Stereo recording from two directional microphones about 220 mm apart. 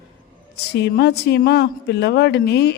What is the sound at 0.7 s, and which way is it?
Speech, 50° left (ahead or behind).